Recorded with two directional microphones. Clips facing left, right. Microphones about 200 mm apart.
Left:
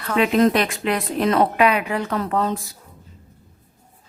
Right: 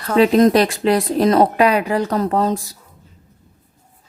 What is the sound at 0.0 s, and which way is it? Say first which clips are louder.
Speech: right 5 dB; 35° right (ahead or behind).